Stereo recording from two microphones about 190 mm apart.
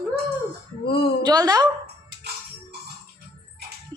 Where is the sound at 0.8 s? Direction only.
55° left (ahead or behind).